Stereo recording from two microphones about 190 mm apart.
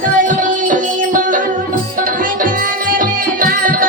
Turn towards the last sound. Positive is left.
turn(degrees=-45)  # may be behind; listen again after turning